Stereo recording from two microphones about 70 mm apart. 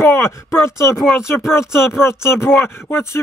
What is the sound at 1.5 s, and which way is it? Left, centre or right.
Speech, left.